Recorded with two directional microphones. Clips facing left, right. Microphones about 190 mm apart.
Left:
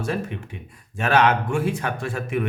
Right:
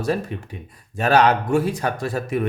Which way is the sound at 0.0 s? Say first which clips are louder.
Right 3 dB; 35° right (ahead or behind).